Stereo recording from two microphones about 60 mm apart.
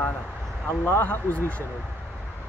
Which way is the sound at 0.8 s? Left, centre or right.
Left.